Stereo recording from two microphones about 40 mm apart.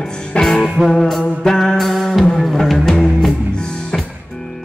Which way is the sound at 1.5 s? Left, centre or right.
Centre.